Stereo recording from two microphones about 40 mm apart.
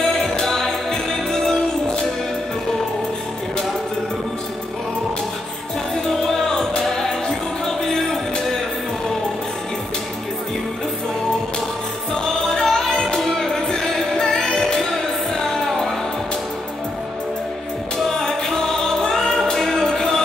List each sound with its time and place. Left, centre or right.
0.4 s music: centre
6.2 s music: centre
12.1 s music: centre
17.9 s music: centre